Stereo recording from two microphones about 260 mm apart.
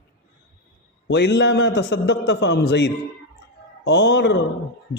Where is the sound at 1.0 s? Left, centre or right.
Left.